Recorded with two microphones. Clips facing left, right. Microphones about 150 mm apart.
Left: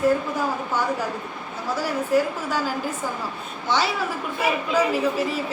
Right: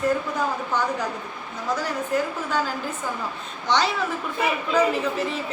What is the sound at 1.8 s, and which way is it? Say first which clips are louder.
Speech: left 7 dB; 10° left (ahead or behind).